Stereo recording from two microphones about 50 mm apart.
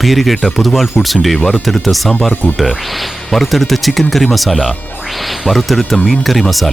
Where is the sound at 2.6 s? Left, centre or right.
Centre.